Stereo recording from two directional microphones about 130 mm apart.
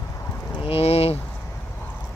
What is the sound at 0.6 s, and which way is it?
Speech, 50° left (ahead or behind).